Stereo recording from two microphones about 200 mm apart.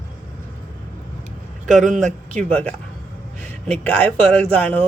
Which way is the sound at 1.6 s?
40° right (ahead or behind).